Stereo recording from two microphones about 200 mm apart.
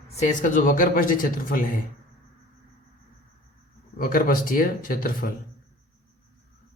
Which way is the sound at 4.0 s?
45° left (ahead or behind).